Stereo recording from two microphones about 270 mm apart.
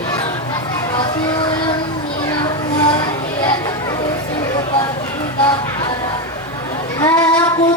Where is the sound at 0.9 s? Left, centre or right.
Centre.